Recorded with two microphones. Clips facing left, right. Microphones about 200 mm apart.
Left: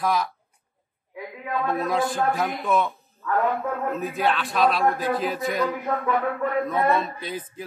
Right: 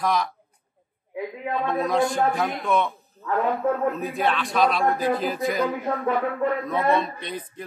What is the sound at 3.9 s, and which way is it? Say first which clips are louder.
A man's voice: even; centre (ahead or behind).